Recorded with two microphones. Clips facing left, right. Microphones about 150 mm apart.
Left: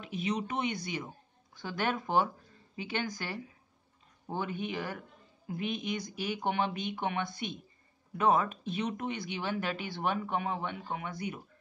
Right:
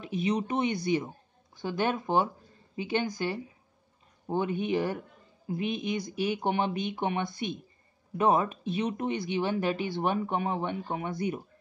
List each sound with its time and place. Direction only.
0.4 s speech: 30° right (ahead or behind)
1.6 s speech: 20° right (ahead or behind)